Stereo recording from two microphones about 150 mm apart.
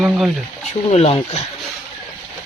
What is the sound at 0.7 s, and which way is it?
Speech, 45° left (ahead or behind).